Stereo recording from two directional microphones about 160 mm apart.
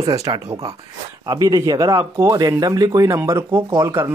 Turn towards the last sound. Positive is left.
turn(degrees=-20)  # may be behind; listen again after turning